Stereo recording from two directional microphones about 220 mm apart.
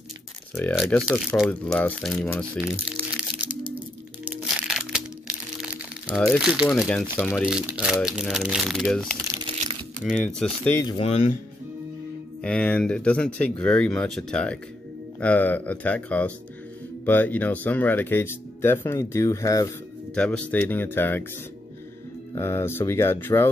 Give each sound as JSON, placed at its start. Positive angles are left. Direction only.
{"t": 0.6, "sound": "speech", "side_deg": 5}
{"t": 4.2, "sound": "crushing", "side_deg": -5}
{"t": 5.6, "sound": "music", "side_deg": -5}
{"t": 6.3, "sound": "speech", "side_deg": -5}
{"t": 9.3, "sound": "crumpling", "side_deg": -20}
{"t": 9.9, "sound": "speech", "side_deg": 0}
{"t": 11.0, "sound": "speech", "side_deg": 30}
{"t": 12.4, "sound": "speech", "side_deg": 5}
{"t": 22.3, "sound": "speech", "side_deg": 10}